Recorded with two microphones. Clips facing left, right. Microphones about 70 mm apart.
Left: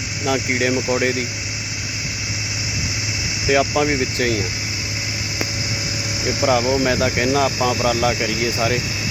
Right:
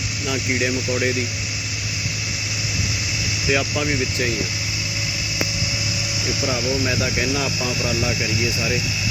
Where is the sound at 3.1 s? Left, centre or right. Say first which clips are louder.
Left 3 dB; left.